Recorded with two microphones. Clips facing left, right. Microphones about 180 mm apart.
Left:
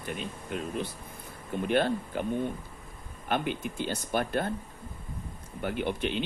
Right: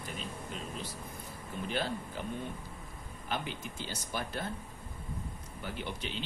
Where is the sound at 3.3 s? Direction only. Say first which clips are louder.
Left 8 dB; 60° left (ahead or behind).